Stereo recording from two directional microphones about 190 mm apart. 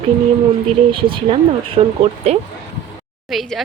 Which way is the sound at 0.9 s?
25° right (ahead or behind).